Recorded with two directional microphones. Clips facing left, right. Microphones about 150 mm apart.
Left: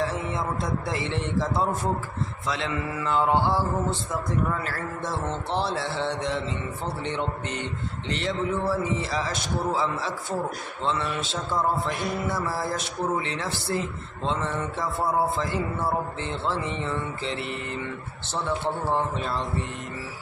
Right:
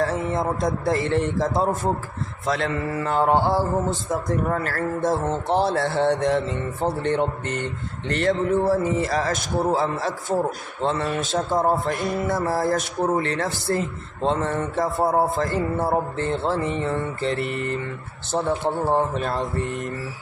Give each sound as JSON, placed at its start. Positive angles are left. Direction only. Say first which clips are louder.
{"t": 0.0, "sound": "a man's voice", "louder": "right 5 dB", "side_deg": -45}